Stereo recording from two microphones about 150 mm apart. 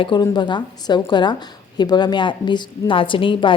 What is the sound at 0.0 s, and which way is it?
A woman's voice, 30° left (ahead or behind).